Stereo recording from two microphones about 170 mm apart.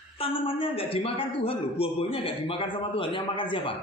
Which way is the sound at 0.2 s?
30° left (ahead or behind).